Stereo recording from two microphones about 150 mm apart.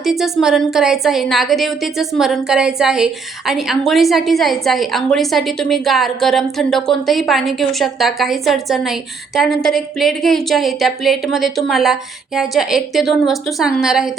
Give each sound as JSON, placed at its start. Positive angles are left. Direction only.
{"t": 0.0, "sound": "a woman's voice", "side_deg": 0}